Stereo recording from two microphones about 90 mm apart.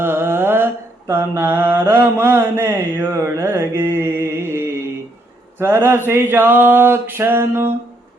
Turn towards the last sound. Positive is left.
turn(degrees=-25)  # may be behind; listen again after turning